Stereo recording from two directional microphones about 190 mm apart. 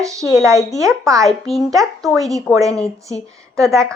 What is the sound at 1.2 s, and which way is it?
Speech, centre (ahead or behind).